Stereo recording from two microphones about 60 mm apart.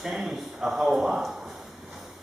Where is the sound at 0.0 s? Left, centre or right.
Centre.